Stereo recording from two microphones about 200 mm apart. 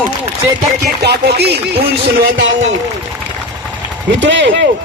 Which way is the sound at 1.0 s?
55° right (ahead or behind).